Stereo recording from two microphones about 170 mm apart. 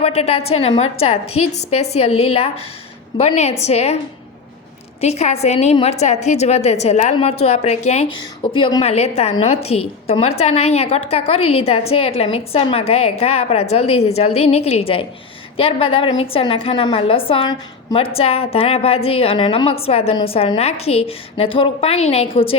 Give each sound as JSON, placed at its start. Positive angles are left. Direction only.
{"t": 0.0, "sound": "a woman's voice", "side_deg": 35}
{"t": 4.9, "sound": "a woman's voice", "side_deg": 40}